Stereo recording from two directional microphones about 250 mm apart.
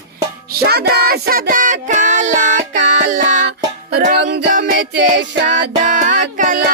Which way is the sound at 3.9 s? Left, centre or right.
Right.